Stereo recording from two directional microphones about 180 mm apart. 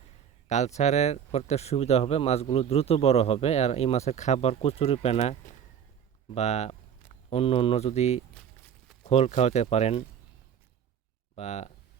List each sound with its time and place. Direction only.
0.4 s speech: 40° left (ahead or behind)
8.4 s walk: 5° left (ahead or behind)
9.0 s speech: 35° left (ahead or behind)
11.3 s speech: 40° left (ahead or behind)